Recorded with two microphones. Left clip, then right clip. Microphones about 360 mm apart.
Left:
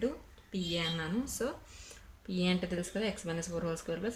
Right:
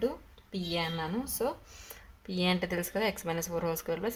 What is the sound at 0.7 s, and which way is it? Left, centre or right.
A woman's voice, centre.